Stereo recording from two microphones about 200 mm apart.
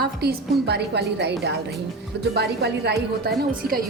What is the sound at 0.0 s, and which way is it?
A woman's voice, 55° right (ahead or behind).